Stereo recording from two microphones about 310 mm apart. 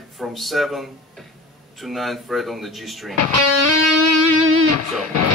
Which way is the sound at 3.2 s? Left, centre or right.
Right.